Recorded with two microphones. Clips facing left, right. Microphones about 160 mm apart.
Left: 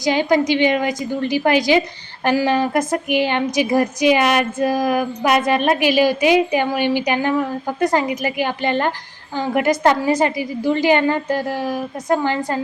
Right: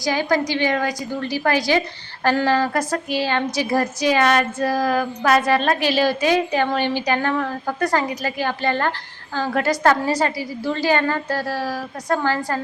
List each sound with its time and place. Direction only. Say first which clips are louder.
0.0 s a woman's voice: left 4 dB; 20° left (ahead or behind)